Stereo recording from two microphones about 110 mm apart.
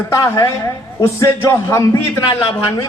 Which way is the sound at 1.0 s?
25° left (ahead or behind).